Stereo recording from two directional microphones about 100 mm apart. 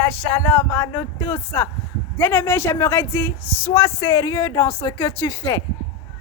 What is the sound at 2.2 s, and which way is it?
Speech, 20° left (ahead or behind).